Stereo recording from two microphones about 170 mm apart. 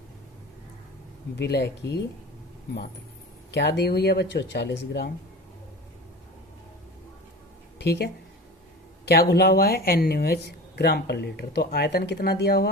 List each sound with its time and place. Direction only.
1.4 s speech: 80° left
3.5 s speech: 80° left
7.8 s speech: 75° left (ahead or behind)